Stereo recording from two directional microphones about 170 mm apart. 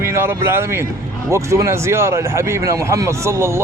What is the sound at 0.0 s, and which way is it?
Speech, 15° right (ahead or behind).